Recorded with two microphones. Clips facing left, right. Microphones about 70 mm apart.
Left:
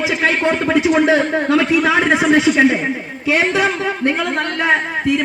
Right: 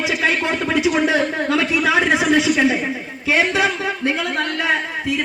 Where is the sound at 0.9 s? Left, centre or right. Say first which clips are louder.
Left 4 dB; left.